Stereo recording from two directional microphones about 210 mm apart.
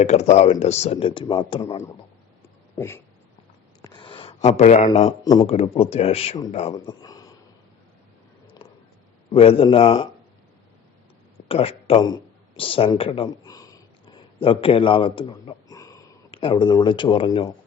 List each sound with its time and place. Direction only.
0.0 s a man's voice: 30° left (ahead or behind)
2.7 s a sound: 10° left (ahead or behind); by 4.9 s 30° left (ahead or behind)
5.2 s a man's voice: 20° left (ahead or behind)
6.8 s a sound: 15° left (ahead or behind)
9.3 s a man's voice: 25° left (ahead or behind)
11.4 s speech: 25° left (ahead or behind)